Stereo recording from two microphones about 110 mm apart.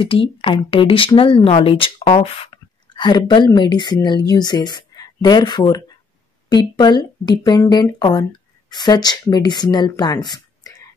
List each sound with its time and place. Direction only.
0.0 s speech: 55° left (ahead or behind)
2.5 s speech: 40° left (ahead or behind)